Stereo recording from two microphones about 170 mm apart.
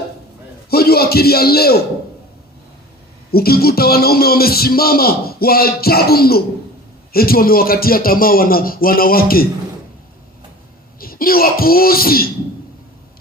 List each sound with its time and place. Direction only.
0.7 s a man's voice: 65° left (ahead or behind)
3.3 s a man's voice: 65° left (ahead or behind)
11.0 s a man's voice: 60° left (ahead or behind)